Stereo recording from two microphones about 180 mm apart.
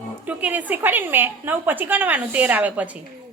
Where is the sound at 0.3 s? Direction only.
10° right (ahead or behind).